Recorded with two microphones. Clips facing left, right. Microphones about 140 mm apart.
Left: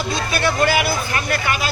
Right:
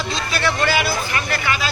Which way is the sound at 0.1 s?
50° left (ahead or behind).